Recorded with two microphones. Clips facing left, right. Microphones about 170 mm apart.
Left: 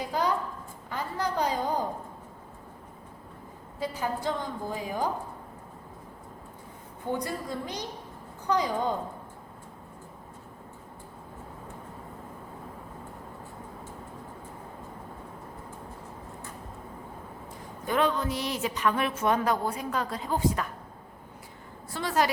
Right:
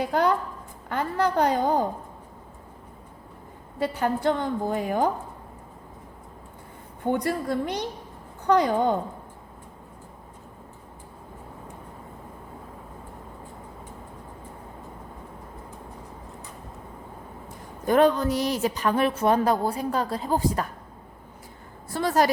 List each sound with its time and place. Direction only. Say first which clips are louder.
0.0 s a woman's voice: right 5 dB; 60° right (ahead or behind)
3.8 s a woman's voice: right 6 dB; 65° right (ahead or behind)
7.0 s a woman's voice: right 6 dB; 65° right (ahead or behind)
17.8 s speech: right 7 dB; 45° right (ahead or behind)
21.9 s speech: right 5 dB; 40° right (ahead or behind)